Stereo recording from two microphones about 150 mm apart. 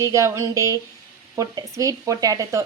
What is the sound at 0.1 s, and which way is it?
Speech, 20° right (ahead or behind).